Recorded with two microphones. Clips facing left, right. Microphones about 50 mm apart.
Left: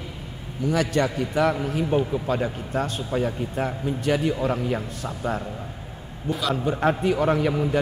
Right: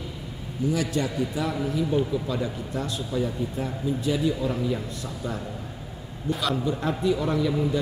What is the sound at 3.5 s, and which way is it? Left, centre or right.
Speech, left.